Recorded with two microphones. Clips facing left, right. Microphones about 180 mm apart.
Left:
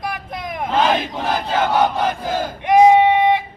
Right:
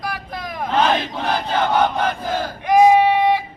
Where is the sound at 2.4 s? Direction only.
20° left (ahead or behind).